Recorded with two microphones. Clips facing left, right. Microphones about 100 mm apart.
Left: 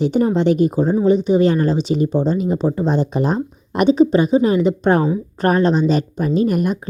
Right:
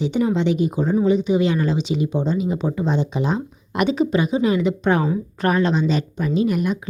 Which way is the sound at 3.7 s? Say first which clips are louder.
Left 6 dB; 35° left (ahead or behind).